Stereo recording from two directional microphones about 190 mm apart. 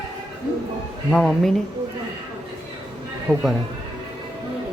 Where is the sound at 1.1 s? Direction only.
5° left (ahead or behind).